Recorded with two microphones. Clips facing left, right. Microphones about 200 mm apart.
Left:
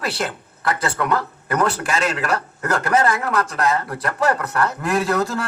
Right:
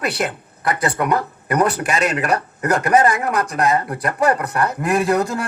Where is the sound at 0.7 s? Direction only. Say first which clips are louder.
Right 2 dB; 15° right (ahead or behind).